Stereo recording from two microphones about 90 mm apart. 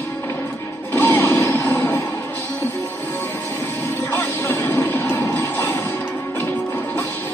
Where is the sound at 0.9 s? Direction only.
20° left (ahead or behind).